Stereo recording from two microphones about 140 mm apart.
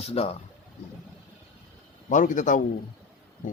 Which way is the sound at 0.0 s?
45° left (ahead or behind).